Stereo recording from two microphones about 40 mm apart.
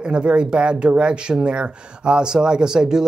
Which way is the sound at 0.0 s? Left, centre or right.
Right.